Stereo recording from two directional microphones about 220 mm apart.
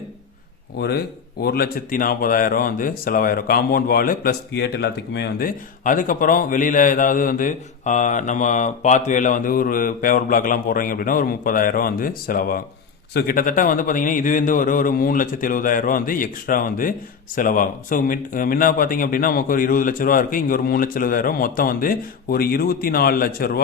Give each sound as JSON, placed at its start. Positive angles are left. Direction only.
{"t": 0.8, "sound": "speech", "side_deg": 45}